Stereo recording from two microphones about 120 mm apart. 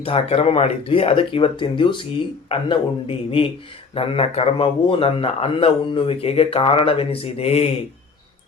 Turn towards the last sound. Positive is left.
turn(degrees=60)  # may be behind; listen again after turning